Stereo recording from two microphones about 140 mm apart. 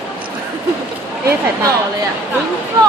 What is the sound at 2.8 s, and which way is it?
Speech, 25° right (ahead or behind).